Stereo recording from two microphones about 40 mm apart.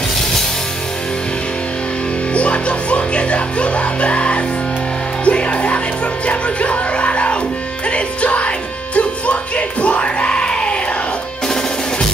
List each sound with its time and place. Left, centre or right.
2.3 s music: left